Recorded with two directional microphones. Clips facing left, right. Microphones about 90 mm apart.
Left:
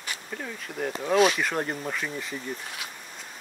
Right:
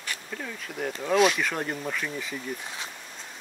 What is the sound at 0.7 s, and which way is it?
Speech, centre (ahead or behind).